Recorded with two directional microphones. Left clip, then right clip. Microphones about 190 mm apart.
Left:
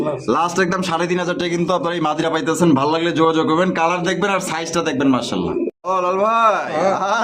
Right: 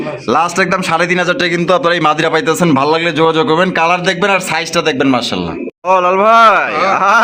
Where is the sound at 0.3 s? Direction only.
25° right (ahead or behind).